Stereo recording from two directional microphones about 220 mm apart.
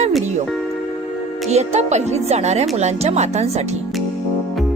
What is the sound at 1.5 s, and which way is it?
Speech, 30° right (ahead or behind).